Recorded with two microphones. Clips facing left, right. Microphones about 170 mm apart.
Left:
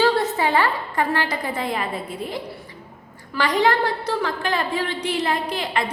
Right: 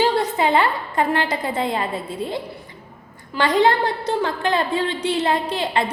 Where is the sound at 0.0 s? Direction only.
20° right (ahead or behind).